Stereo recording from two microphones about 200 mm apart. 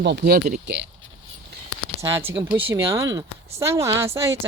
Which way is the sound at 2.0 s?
15° right (ahead or behind).